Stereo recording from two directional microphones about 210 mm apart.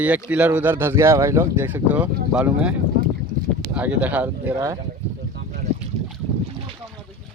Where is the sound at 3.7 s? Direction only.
5° right (ahead or behind).